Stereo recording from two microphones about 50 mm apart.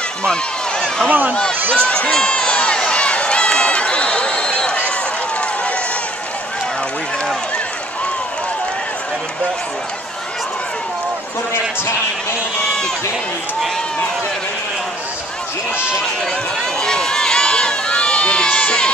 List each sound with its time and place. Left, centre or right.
0.2 s run: centre
1.0 s speech: right
1.3 s speech: centre
2.0 s run: centre
16.8 s run: centre